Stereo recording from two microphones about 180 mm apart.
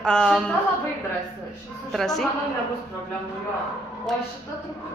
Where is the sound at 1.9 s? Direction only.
Centre (ahead or behind).